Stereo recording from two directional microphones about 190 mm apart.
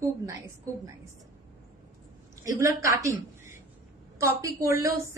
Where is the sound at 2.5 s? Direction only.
15° right (ahead or behind).